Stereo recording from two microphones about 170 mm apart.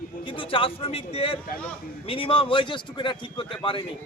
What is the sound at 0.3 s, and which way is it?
A man's voice, 30° left (ahead or behind).